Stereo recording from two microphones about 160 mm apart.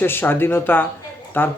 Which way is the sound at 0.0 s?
15° left (ahead or behind).